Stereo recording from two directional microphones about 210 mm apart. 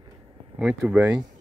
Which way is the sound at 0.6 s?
Centre (ahead or behind).